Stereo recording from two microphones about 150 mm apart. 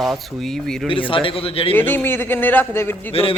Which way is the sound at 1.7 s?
15° left (ahead or behind).